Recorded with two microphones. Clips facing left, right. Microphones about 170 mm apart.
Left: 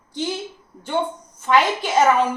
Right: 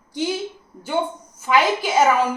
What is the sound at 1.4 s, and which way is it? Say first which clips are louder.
Speech: even; 5° right (ahead or behind).